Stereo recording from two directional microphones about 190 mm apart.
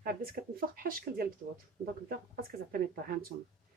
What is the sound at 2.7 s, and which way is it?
Speech, 50° right (ahead or behind).